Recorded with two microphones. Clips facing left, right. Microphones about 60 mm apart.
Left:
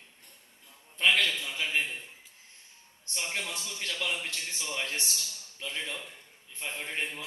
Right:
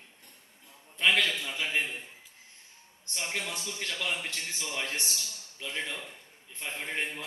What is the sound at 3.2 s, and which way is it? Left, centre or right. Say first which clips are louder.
A man's voice: even; right.